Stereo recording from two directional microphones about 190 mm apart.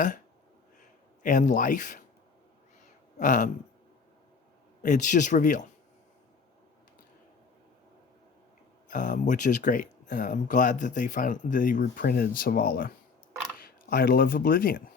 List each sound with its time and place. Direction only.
1.2 s speech: 45° left (ahead or behind)
3.2 s speech: 45° left (ahead or behind)
4.8 s speech: 40° left (ahead or behind)
8.9 s speech: 45° left (ahead or behind)